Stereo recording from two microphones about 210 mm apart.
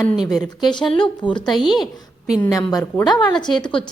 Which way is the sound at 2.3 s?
15° left (ahead or behind).